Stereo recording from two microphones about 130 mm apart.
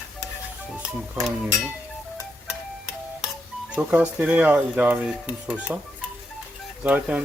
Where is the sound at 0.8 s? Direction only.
5° right (ahead or behind).